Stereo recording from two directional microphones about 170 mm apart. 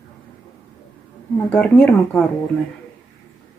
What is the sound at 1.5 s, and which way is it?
Speech, 5° left (ahead or behind).